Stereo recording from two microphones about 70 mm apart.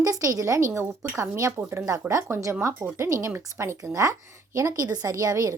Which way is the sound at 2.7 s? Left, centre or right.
Right.